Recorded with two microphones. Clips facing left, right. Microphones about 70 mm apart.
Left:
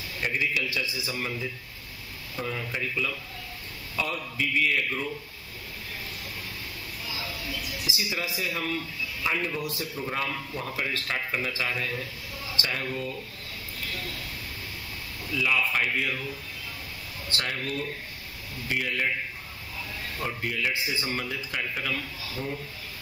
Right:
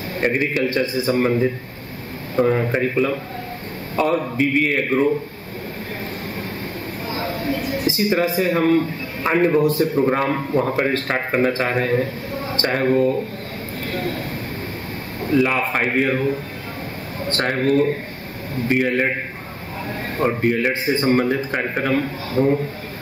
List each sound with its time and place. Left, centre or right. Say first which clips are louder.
0.2 s a man's voice: right 9 dB; right
7.1 s a man's voice: right 13 dB; right
13.8 s vehicle: right 12 dB; right
15.2 s a man's voice: right 9 dB; right